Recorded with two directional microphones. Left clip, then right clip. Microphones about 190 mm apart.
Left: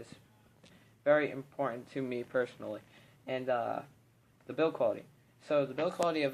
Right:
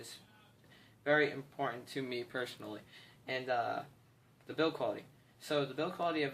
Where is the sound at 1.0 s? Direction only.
35° left (ahead or behind).